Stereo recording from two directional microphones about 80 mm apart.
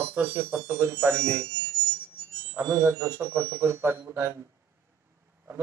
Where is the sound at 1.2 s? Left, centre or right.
Right.